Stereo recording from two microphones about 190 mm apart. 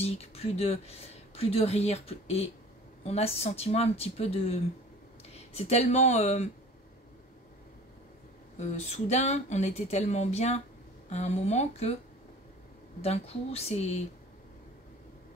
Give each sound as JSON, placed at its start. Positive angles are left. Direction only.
{"t": 0.0, "sound": "speech", "side_deg": 30}
{"t": 8.5, "sound": "speech", "side_deg": 35}
{"t": 13.0, "sound": "speech", "side_deg": 35}